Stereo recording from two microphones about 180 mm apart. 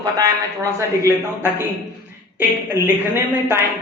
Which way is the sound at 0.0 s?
15° right (ahead or behind).